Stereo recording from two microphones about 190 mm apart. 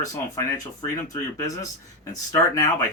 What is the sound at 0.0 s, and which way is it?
Speech, 20° left (ahead or behind).